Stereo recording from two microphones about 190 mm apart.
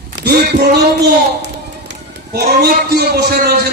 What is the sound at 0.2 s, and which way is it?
Speech, 55° right (ahead or behind).